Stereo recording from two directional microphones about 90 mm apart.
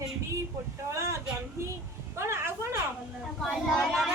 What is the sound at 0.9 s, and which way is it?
A woman's voice, 30° right (ahead or behind).